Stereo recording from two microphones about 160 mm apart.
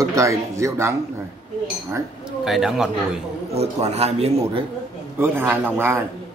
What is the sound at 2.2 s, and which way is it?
Speech, centre (ahead or behind).